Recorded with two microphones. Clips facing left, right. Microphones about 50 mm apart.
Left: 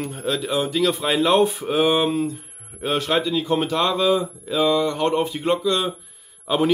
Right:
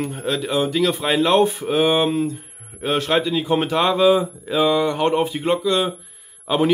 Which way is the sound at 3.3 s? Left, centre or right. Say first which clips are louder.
Right 2 dB; right.